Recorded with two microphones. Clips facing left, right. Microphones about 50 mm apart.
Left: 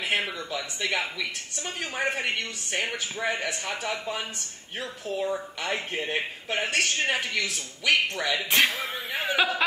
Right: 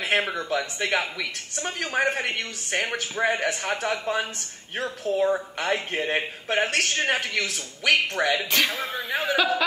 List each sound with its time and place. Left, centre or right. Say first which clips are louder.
0.0 s speech: right 4 dB; right
9.2 s speech: right 1 dB; centre